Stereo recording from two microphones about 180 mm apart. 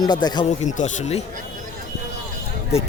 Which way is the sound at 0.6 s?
40° left (ahead or behind).